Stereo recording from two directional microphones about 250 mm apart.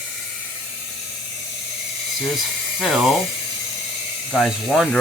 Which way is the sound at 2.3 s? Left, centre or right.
Centre.